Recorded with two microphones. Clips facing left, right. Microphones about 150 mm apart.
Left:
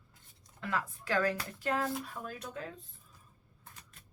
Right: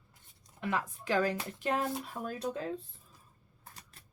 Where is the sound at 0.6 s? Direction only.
20° right (ahead or behind).